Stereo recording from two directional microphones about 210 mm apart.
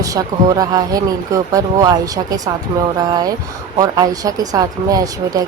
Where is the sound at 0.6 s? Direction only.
20° right (ahead or behind).